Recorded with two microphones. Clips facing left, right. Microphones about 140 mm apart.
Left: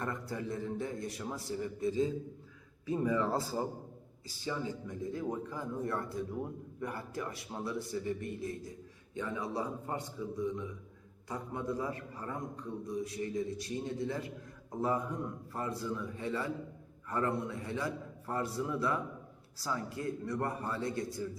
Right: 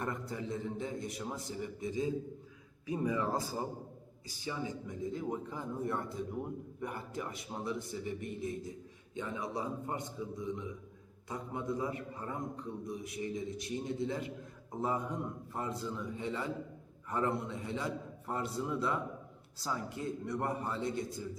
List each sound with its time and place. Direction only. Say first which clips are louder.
0.0 s a man's voice: left 1 dB; 20° right (ahead or behind)